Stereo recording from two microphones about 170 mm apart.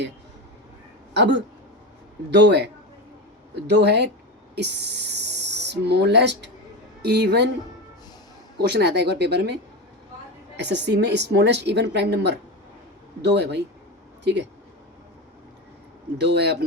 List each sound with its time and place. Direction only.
1.1 s a man's voice: 90° right
3.7 s speech: 80° right
7.0 s speech: 70° right (ahead or behind)
8.7 s speech: 75° right (ahead or behind)
10.6 s speech: 90° right
13.3 s speech: 80° right
16.1 s speech: 80° right